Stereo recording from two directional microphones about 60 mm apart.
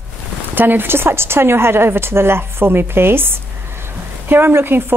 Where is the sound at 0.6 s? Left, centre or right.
Right.